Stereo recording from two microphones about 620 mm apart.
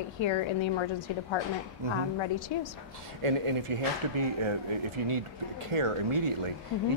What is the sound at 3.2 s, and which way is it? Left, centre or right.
Speech, right.